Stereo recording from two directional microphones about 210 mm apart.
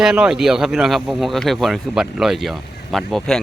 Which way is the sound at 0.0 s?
5° right (ahead or behind).